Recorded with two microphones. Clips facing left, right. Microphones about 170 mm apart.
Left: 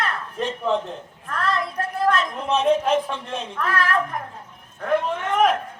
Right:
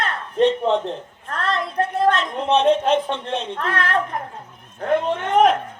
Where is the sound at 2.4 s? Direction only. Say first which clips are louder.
Right 5 dB; 30° right (ahead or behind).